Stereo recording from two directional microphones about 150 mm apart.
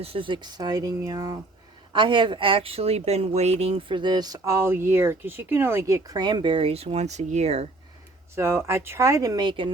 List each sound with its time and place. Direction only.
0.0 s speech: 35° right (ahead or behind)
1.9 s speech: 30° right (ahead or behind)
8.4 s speech: 15° right (ahead or behind)